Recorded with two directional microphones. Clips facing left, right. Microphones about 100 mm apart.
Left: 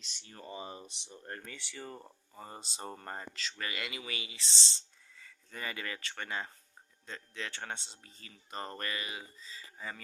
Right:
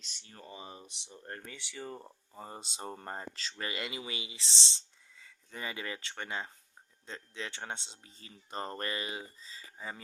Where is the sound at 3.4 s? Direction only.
25° right (ahead or behind).